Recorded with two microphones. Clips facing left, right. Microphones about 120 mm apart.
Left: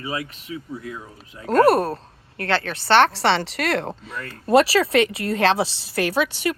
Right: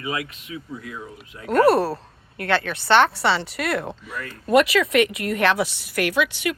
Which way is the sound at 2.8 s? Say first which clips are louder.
Left 2 dB; 60° left (ahead or behind).